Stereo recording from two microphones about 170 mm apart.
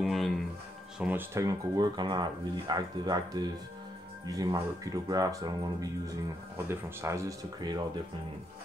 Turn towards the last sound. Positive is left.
turn(degrees=-20)  # may be behind; listen again after turning